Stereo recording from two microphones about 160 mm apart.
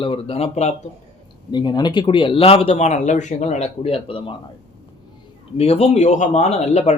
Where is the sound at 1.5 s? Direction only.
25° left (ahead or behind).